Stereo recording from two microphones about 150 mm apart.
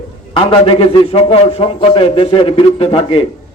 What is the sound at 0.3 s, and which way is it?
A man's voice, 40° left (ahead or behind).